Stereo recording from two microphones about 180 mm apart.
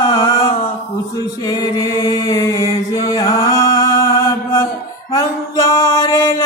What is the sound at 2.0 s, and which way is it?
Chant, 20° left (ahead or behind).